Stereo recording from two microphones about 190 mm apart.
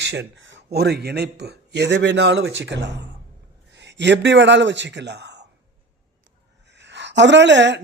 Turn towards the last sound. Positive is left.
turn(degrees=-65)  # may be behind; listen again after turning